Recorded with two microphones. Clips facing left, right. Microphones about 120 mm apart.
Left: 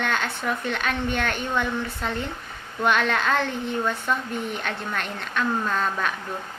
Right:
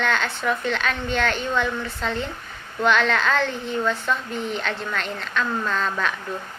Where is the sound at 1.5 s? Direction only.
10° left (ahead or behind).